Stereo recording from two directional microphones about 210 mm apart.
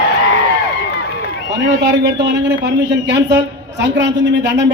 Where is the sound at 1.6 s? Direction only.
55° right (ahead or behind).